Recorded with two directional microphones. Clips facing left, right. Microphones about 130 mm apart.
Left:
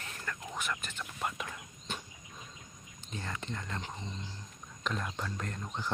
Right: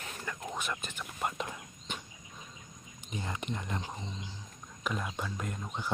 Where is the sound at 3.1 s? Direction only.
15° right (ahead or behind).